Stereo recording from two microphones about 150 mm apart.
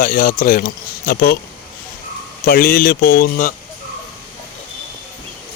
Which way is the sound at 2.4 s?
75° left (ahead or behind).